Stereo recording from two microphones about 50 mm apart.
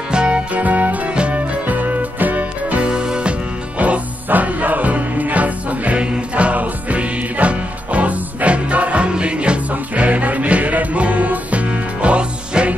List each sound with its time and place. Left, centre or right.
0.1 s music: right
3.7 s music: right